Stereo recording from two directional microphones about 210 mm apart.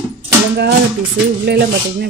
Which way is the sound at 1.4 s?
50° right (ahead or behind).